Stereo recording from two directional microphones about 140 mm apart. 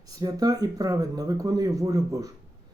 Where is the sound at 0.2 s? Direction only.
25° right (ahead or behind).